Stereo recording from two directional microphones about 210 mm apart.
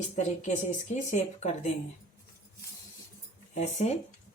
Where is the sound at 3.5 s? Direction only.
35° left (ahead or behind).